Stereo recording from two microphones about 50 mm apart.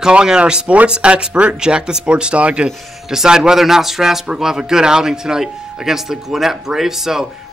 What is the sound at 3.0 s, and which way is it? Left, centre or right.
Speech, centre.